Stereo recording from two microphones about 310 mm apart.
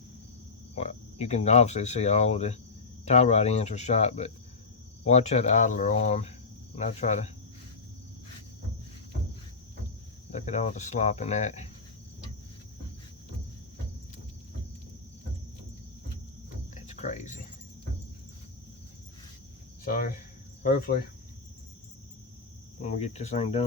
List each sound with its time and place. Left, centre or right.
0.8 s speech: left
10.3 s speech: left
16.7 s cricket: left
19.8 s speech: left
22.8 s speech: left